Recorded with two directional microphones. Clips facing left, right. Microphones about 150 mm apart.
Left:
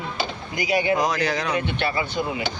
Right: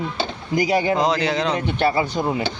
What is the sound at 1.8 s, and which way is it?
Speech, 40° right (ahead or behind).